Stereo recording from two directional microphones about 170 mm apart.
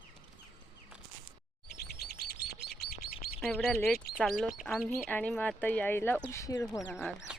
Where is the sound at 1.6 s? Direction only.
70° left (ahead or behind).